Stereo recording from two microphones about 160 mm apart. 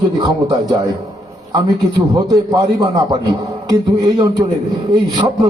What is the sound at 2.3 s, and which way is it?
A man's voice, 25° right (ahead or behind).